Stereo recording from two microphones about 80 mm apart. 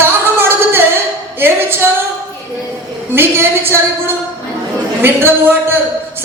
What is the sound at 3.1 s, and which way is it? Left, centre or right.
Speech, right.